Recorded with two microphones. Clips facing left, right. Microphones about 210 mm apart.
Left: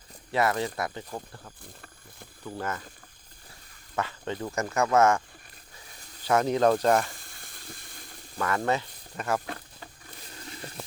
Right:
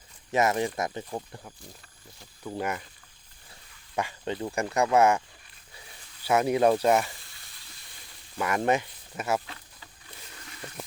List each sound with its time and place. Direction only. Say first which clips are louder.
0.3 s speech: right 1 dB; 20° right (ahead or behind)
3.9 s speech: right 1 dB; 15° right (ahead or behind)
6.2 s speech: even; 10° right (ahead or behind)
7.2 s frying: left 6 dB; 50° left (ahead or behind)
8.4 s speech: right 2 dB; 15° right (ahead or behind)
9.5 s a sound: left 8 dB; 55° left (ahead or behind)
10.4 s a sound: left 3 dB; 35° left (ahead or behind)